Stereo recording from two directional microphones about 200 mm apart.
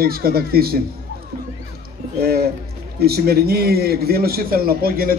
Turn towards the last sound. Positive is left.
turn(degrees=-50)  # may be behind; listen again after turning